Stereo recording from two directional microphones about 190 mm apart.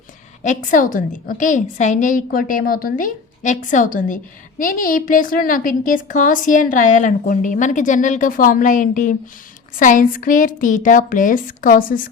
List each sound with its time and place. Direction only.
0.4 s a woman's voice: 40° left (ahead or behind)